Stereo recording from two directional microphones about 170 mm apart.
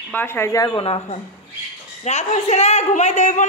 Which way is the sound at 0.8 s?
35° left (ahead or behind).